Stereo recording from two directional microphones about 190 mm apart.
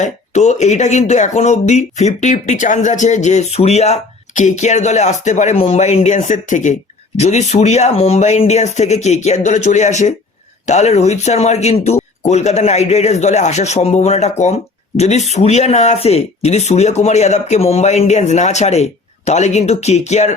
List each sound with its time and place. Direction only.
0.0 s speech: 35° left (ahead or behind)